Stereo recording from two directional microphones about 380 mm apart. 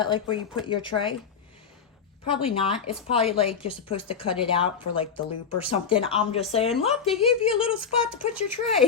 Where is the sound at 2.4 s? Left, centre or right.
Centre.